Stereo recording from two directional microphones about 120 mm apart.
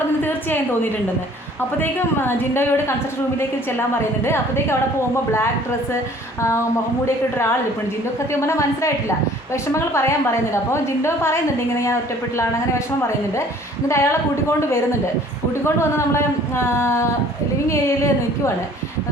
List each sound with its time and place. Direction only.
0.2 s a sound: 20° left (ahead or behind)
1.8 s a woman's voice: 20° left (ahead or behind)
8.3 s a woman's voice: 25° left (ahead or behind)
13.8 s a woman's voice: 25° left (ahead or behind)
15.6 s a woman's voice: 20° left (ahead or behind)